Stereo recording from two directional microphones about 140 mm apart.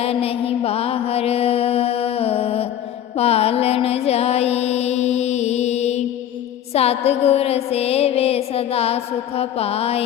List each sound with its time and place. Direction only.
0.0 s music: 45° left (ahead or behind)